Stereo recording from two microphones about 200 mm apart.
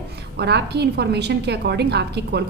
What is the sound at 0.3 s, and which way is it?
A woman's voice, 55° right (ahead or behind).